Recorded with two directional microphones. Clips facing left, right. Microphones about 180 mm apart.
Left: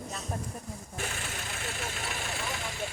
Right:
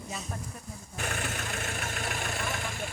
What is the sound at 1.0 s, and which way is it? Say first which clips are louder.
Engine: right 7 dB; 55° right (ahead or behind).